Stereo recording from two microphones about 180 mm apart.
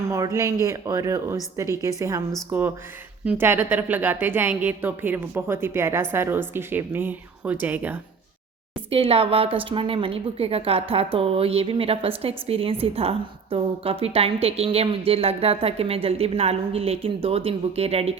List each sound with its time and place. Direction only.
0.1 s a woman's voice: 15° right (ahead or behind)
8.9 s a woman's voice: 30° right (ahead or behind)